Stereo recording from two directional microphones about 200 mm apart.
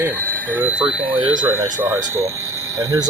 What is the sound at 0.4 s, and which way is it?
Speech, 10° right (ahead or behind).